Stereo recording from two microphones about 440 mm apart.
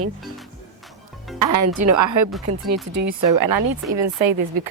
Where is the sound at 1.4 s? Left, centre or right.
Right.